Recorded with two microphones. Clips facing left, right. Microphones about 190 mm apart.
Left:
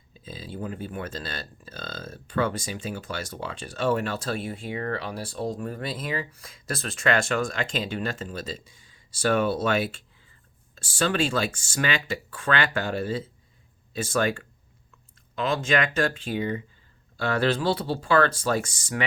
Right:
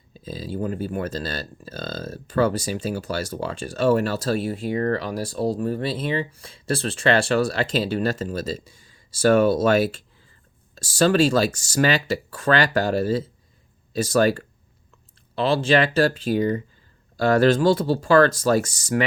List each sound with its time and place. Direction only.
0.1 s speech: 40° right (ahead or behind)